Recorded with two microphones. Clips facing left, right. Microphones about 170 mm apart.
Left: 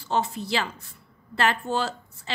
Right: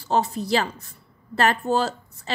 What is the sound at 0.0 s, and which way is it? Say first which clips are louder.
A woman's voice: right 3 dB; 40° right (ahead or behind).